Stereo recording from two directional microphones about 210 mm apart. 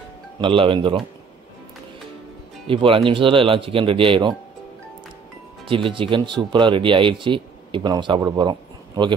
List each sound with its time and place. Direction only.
0.4 s speech: 25° right (ahead or behind)
2.6 s speech: 25° right (ahead or behind)
5.7 s speech: 25° right (ahead or behind)